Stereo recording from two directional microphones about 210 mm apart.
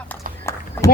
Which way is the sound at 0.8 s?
15° left (ahead or behind).